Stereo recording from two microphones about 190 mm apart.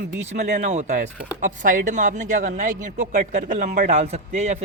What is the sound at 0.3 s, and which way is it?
Speech, 40° right (ahead or behind).